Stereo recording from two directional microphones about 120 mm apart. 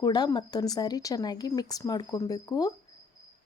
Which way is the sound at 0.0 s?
35° left (ahead or behind).